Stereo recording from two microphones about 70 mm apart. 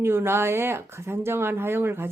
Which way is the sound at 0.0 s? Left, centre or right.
Right.